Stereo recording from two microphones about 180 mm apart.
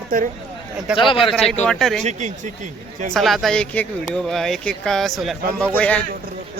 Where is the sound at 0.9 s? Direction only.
30° left (ahead or behind).